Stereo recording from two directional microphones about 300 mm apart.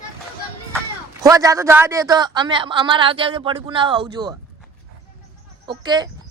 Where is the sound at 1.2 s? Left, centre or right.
Centre.